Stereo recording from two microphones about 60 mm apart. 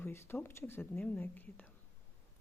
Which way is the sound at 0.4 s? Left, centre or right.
Left.